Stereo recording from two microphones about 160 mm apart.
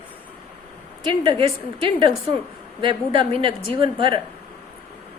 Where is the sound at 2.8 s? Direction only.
30° right (ahead or behind).